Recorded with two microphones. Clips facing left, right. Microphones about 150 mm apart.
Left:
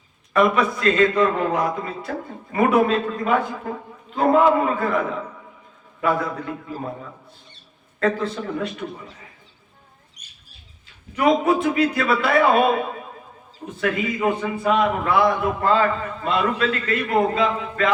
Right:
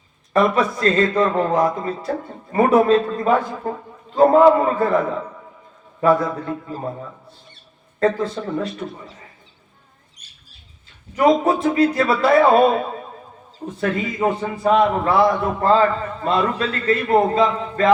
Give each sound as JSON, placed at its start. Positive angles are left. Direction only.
{"t": 0.3, "sound": "a man's voice", "side_deg": -35}
{"t": 6.0, "sound": "a man's voice", "side_deg": -35}
{"t": 8.5, "sound": "a man's voice", "side_deg": -35}
{"t": 11.2, "sound": "a man's voice", "side_deg": -35}
{"t": 13.7, "sound": "a man's voice", "side_deg": -35}